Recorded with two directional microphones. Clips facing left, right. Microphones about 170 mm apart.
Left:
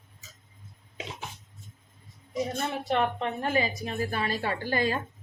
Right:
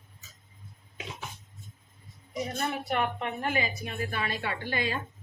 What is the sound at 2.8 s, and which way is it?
A woman's voice, 30° left (ahead or behind).